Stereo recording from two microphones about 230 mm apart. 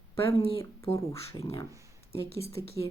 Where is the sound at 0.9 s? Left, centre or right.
Left.